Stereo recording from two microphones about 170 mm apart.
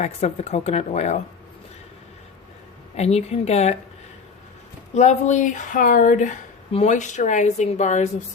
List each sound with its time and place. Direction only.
0.0 s speech: 40° left (ahead or behind)
2.9 s speech: 40° left (ahead or behind)
4.9 s speech: 45° left (ahead or behind)